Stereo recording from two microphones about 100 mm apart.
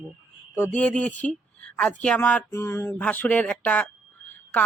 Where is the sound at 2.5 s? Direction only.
25° left (ahead or behind).